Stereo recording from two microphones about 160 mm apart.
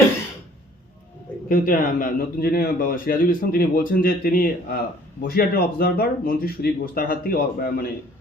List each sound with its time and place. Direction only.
1.5 s a man's voice: 60° left (ahead or behind)